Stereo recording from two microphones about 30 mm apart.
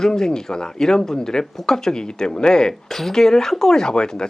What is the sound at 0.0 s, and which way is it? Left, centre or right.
Speech, centre.